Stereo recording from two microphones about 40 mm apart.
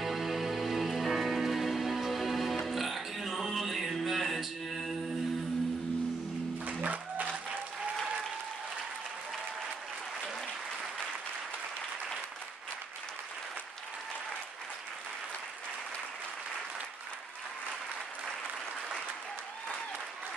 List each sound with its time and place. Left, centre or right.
0.0 s music: centre
6.6 s music: right